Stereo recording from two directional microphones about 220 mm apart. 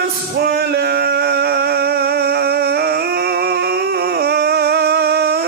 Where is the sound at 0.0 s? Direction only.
45° right (ahead or behind).